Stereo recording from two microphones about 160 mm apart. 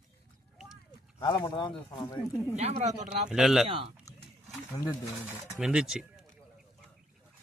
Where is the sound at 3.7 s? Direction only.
35° right (ahead or behind).